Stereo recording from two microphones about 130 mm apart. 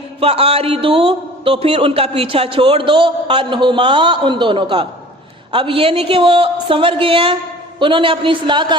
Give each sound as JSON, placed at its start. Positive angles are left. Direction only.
{"t": 0.2, "sound": "a man's voice", "side_deg": -50}